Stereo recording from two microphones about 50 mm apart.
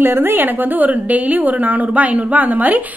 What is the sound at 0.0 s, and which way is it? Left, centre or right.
A woman's voice, right.